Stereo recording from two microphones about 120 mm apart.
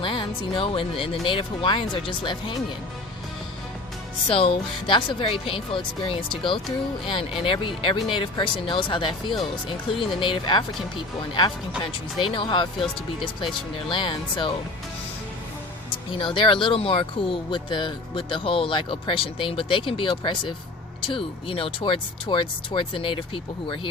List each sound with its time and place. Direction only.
0.0 s speech: 45° left (ahead or behind)
4.3 s speech: 50° left (ahead or behind)
16.1 s speech: 45° left (ahead or behind)